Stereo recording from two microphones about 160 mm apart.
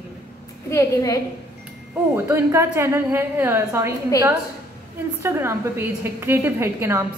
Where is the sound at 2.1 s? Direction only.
15° right (ahead or behind).